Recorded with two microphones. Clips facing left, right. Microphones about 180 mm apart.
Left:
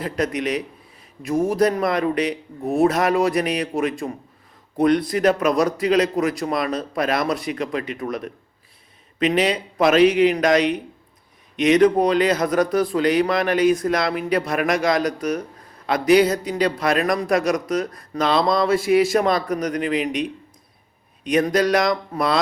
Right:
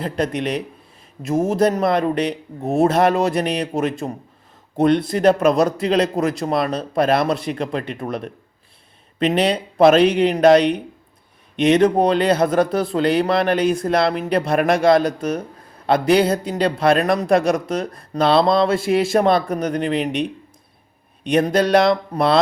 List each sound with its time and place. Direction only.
0.0 s a man's voice: 30° right (ahead or behind)
21.2 s a man's voice: 30° right (ahead or behind)